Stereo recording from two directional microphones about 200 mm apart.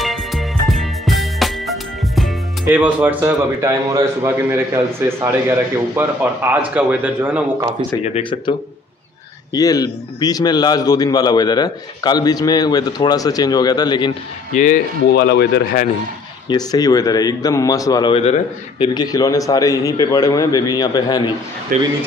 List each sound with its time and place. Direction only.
0.0 s music: centre (ahead or behind)
8.0 s speech: 30° left (ahead or behind)
14.5 s speech: 40° left (ahead or behind)
15.1 s speech: 55° left (ahead or behind)
16.4 s speech: 20° left (ahead or behind)
21.7 s speech: 45° right (ahead or behind)